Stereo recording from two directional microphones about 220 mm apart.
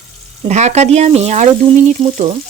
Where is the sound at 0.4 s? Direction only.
30° right (ahead or behind).